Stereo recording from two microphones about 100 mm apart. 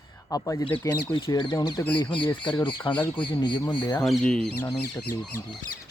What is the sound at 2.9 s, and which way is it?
Speech, 15° left (ahead or behind).